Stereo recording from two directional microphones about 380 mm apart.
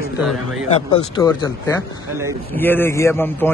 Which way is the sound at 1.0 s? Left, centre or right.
Centre.